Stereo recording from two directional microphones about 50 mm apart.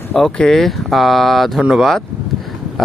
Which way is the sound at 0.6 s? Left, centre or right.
Centre.